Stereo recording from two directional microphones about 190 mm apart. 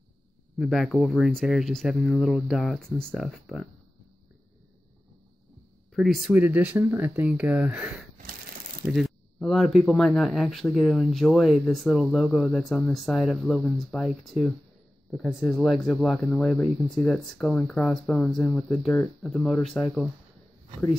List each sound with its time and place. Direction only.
0.6 s speech: centre (ahead or behind)
5.9 s speech: centre (ahead or behind)